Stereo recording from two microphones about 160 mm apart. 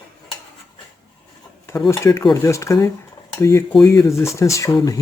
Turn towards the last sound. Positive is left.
turn(degrees=20)  # may be behind; listen again after turning